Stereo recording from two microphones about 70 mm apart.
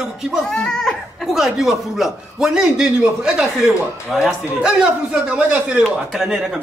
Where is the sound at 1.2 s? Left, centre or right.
Centre.